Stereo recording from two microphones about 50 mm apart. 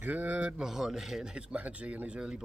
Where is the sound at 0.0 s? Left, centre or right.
Right.